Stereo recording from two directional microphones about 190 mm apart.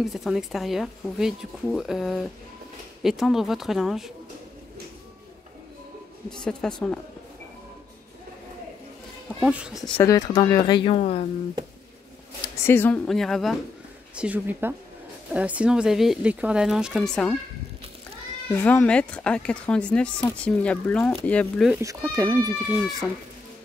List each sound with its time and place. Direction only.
0.0 s speech: centre (ahead or behind)
6.4 s speech: 5° left (ahead or behind)
9.4 s speech: 5° right (ahead or behind)
9.9 s speech: 20° left (ahead or behind); by 11.2 s 35° left (ahead or behind)
12.6 s speech: 10° left (ahead or behind)
18.5 s speech: 10° left (ahead or behind)
21.7 s speech: 15° right (ahead or behind)